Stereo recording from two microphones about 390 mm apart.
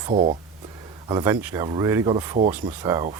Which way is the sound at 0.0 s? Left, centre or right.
Centre.